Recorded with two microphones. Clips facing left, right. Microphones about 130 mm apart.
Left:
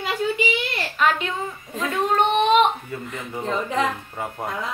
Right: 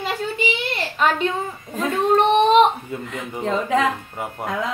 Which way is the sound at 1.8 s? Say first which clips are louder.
Right 3 dB; 35° right (ahead or behind).